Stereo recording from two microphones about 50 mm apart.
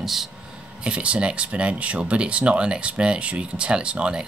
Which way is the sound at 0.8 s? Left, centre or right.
Right.